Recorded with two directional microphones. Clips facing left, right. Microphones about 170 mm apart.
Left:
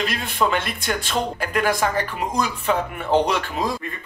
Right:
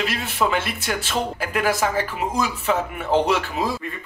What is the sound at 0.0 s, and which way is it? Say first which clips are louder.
Speech: even; 5° right (ahead or behind).